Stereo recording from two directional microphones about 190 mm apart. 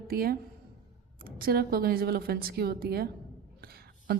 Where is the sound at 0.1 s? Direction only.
50° right (ahead or behind).